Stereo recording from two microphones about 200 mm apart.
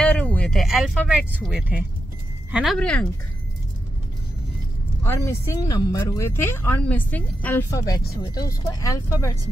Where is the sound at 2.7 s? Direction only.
5° left (ahead or behind).